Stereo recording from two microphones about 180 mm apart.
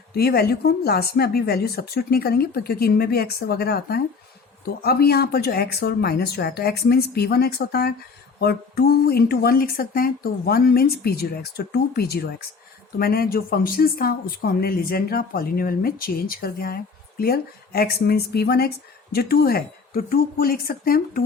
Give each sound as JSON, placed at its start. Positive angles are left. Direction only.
{"t": 0.1, "sound": "speech", "side_deg": 60}